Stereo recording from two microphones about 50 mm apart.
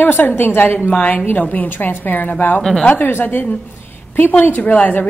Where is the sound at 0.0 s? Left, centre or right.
Left.